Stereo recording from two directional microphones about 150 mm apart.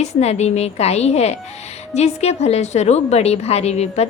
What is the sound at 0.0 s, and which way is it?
A woman's voice, 45° left (ahead or behind).